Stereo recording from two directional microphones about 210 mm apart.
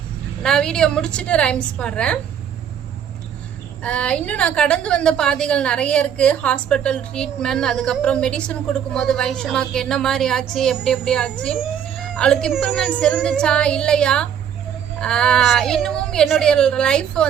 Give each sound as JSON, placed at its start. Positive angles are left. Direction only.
{"t": 0.4, "sound": "a woman's voice", "side_deg": 5}
{"t": 3.8, "sound": "a woman's voice", "side_deg": 5}